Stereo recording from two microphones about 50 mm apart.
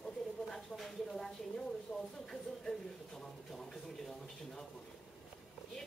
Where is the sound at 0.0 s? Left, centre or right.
Centre.